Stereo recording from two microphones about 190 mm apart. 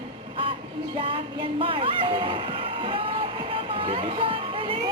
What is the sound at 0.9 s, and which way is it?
Speech, 30° right (ahead or behind).